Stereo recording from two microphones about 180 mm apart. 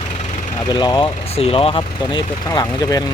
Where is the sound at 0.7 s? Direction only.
20° left (ahead or behind).